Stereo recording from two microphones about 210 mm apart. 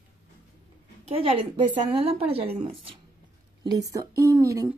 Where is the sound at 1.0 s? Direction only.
25° right (ahead or behind).